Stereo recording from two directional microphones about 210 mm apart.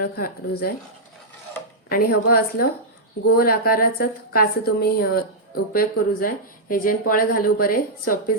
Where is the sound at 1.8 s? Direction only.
45° left (ahead or behind).